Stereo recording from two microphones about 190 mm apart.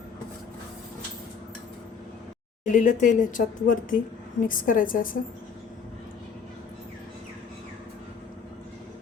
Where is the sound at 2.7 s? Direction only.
40° left (ahead or behind).